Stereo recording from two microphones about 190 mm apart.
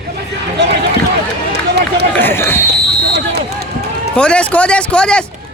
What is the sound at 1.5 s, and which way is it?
Run, 60° right (ahead or behind).